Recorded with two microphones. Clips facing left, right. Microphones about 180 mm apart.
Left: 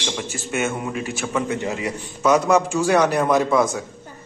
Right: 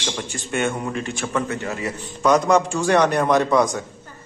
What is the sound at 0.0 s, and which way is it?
A man's voice, 5° left (ahead or behind).